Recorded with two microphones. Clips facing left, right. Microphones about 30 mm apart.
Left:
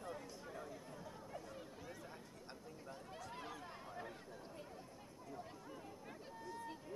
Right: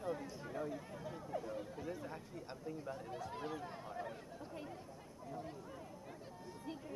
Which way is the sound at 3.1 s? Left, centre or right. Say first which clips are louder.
Right 4 dB; centre.